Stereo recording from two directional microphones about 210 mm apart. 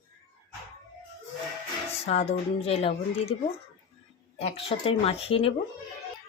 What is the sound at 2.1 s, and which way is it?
Speech, 30° left (ahead or behind).